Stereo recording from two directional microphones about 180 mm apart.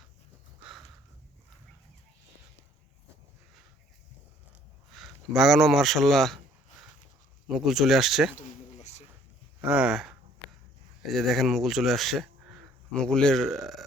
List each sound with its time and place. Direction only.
4.9 s a man's voice: centre (ahead or behind)
7.4 s speech: centre (ahead or behind)
8.4 s a sound: 40° left (ahead or behind)
9.6 s speech: 5° right (ahead or behind)